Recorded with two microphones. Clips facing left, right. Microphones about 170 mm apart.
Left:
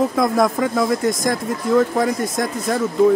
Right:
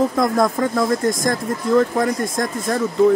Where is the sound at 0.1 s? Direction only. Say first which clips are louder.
Even; centre (ahead or behind).